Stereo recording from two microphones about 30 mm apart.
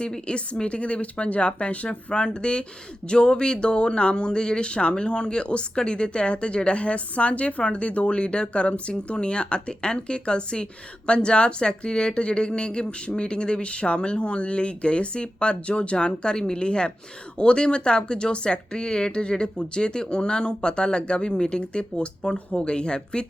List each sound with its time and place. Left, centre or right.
0.6 s speech: left
1.9 s speech: left